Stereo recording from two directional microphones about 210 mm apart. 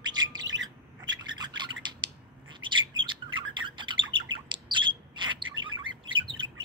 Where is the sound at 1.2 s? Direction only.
20° right (ahead or behind).